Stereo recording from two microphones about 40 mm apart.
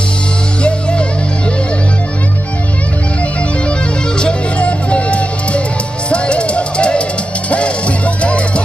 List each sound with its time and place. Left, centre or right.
0.6 s music: left
4.2 s music: left